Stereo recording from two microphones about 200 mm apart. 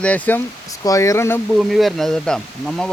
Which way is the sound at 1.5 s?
Centre (ahead or behind).